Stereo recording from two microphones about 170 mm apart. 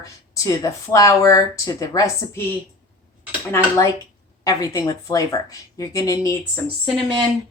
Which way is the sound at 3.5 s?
15° left (ahead or behind).